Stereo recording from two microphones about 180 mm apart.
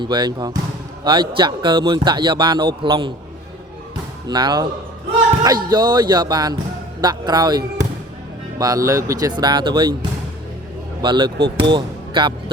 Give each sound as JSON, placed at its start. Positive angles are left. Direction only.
{"t": 0.0, "sound": "a man's voice", "side_deg": -25}
{"t": 4.3, "sound": "a man's voice", "side_deg": -25}
{"t": 11.0, "sound": "a man's voice", "side_deg": -25}